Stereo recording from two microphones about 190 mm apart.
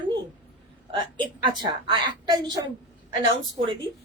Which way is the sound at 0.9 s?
25° right (ahead or behind).